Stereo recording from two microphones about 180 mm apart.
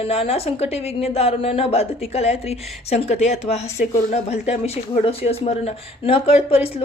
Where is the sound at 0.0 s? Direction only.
35° left (ahead or behind).